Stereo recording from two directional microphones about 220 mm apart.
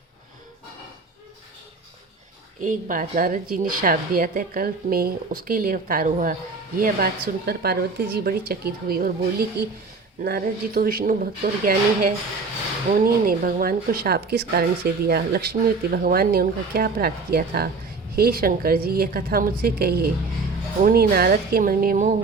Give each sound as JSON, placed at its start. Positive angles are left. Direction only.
{"t": 2.6, "sound": "a woman's voice", "side_deg": -35}